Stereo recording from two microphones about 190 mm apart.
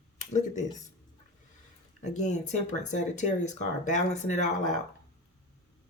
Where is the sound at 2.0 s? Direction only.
40° left (ahead or behind).